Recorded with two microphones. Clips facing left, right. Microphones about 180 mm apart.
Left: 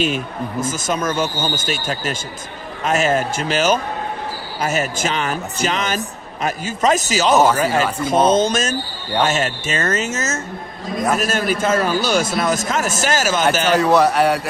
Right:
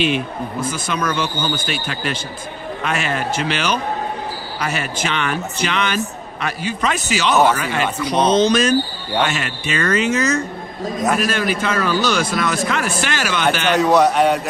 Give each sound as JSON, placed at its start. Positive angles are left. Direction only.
{"t": 0.6, "sound": "a man's voice", "side_deg": 45}
{"t": 13.7, "sound": "a man's voice", "side_deg": 5}